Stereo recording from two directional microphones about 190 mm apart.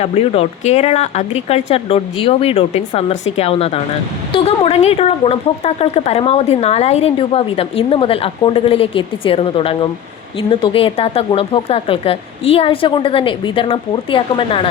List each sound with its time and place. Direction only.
0.0 s speech: 30° left (ahead or behind)